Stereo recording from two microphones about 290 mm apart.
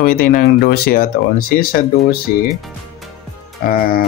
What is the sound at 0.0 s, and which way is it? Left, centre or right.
Speech, left.